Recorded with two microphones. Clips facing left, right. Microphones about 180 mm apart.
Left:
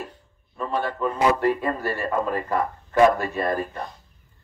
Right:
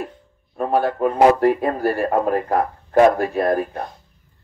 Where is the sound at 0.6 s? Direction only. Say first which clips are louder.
Right 7 dB; 55° right (ahead or behind).